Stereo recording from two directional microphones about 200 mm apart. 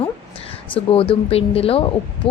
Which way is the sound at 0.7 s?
30° left (ahead or behind).